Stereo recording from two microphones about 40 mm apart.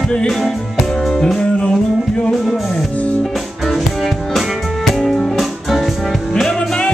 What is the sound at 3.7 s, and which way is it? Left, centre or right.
Music, centre.